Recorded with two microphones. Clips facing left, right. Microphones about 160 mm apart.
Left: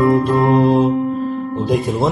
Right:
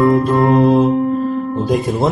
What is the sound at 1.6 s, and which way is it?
Music, centre (ahead or behind).